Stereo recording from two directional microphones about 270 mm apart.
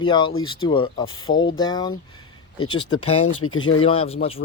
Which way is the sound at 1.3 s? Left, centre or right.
Left.